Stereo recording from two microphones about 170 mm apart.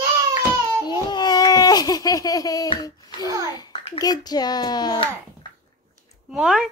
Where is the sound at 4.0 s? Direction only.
25° left (ahead or behind).